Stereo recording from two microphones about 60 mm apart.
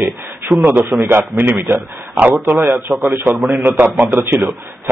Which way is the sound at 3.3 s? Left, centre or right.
Centre.